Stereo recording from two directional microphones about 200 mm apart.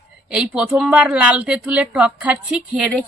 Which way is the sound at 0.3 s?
5° right (ahead or behind).